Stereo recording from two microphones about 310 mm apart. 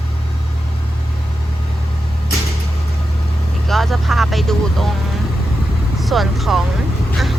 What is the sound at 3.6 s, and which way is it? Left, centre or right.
Vehicle, centre.